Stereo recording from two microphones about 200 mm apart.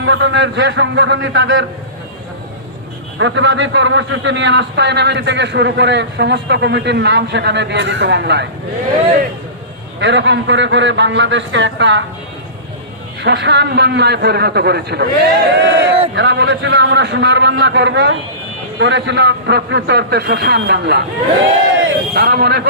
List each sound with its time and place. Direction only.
0.0 s a man's voice: 65° right (ahead or behind)
3.2 s a man's voice: 70° right (ahead or behind)
10.0 s a man's voice: 60° right (ahead or behind)
13.2 s a man's voice: 60° right (ahead or behind)
21.8 s a sound: 60° right (ahead or behind)